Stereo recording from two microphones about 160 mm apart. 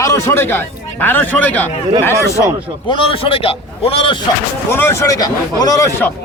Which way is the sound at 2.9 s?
35° left (ahead or behind).